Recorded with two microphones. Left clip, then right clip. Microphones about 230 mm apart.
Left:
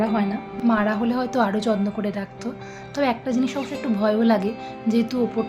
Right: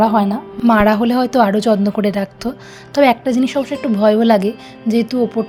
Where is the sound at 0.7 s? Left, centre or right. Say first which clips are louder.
Right 10 dB; right.